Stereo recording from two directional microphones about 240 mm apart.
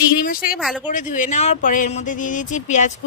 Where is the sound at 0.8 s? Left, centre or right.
Left.